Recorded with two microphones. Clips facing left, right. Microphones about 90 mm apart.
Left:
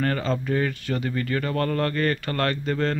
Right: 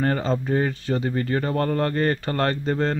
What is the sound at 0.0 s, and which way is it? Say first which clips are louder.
Speech: right 2 dB; 25° right (ahead or behind).